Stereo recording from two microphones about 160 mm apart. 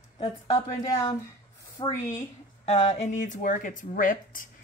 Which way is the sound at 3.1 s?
50° left (ahead or behind).